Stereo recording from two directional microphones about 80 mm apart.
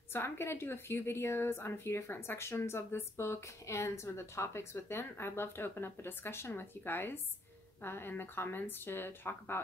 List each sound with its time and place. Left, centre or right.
0.1 s a woman's voice: left